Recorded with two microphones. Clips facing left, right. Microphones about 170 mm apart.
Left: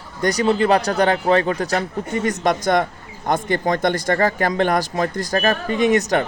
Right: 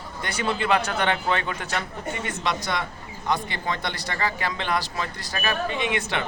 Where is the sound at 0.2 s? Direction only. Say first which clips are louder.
Left 10 dB; 40° left (ahead or behind).